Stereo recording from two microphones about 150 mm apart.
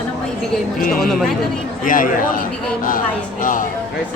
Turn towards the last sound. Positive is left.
turn(degrees=65)  # may be behind; listen again after turning